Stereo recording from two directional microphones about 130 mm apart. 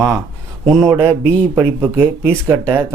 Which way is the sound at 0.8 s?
20° right (ahead or behind).